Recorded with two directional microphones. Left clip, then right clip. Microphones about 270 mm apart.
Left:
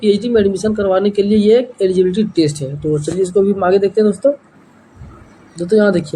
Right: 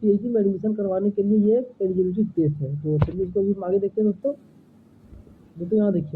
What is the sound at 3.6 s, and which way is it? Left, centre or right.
Speech, centre.